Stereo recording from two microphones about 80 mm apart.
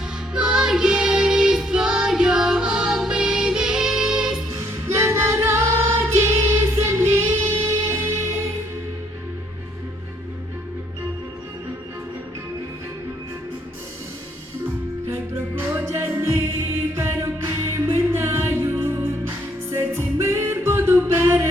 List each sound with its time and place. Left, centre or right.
0.3 s music: centre
4.9 s singing: right
15.0 s music: right